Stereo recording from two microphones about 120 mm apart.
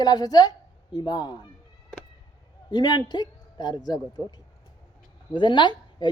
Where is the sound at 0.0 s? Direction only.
35° left (ahead or behind).